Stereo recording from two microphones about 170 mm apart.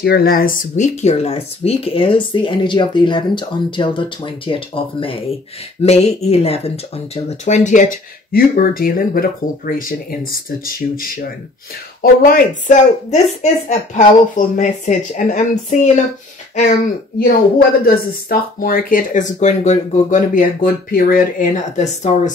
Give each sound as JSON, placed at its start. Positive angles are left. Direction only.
{"t": 0.0, "sound": "a woman's voice", "side_deg": 65}
{"t": 17.2, "sound": "speech", "side_deg": 60}